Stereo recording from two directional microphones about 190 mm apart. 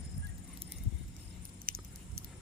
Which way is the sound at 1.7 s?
50° right (ahead or behind).